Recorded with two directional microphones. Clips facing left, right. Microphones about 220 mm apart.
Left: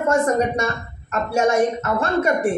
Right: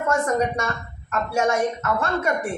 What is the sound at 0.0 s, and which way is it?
A man's voice, 25° left (ahead or behind).